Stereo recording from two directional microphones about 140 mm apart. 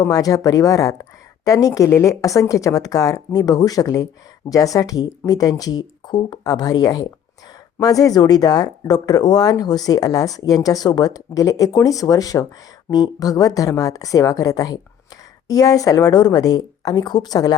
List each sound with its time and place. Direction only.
0.0 s speech: 25° left (ahead or behind)